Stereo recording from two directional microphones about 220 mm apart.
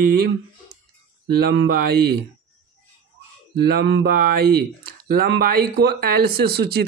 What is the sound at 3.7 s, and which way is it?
Speech, 50° right (ahead or behind).